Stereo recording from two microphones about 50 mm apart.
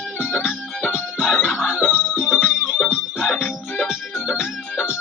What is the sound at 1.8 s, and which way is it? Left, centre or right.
Music, centre.